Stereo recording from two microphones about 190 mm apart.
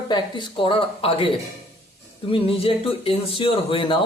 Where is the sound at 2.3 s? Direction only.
30° left (ahead or behind).